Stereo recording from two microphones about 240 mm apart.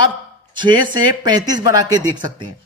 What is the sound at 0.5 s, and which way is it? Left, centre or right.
A man's voice, centre.